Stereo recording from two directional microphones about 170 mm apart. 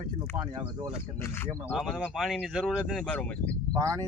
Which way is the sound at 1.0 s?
15° left (ahead or behind).